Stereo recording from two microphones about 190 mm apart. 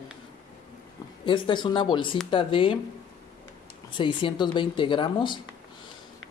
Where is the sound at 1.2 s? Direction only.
25° left (ahead or behind).